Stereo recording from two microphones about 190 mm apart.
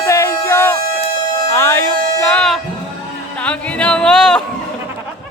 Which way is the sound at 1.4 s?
15° left (ahead or behind).